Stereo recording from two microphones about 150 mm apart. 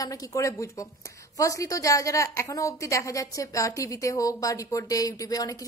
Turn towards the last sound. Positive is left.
turn(degrees=25)  # may be behind; listen again after turning